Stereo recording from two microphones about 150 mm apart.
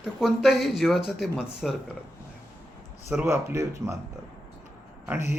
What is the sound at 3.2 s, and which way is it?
Speech, 20° right (ahead or behind).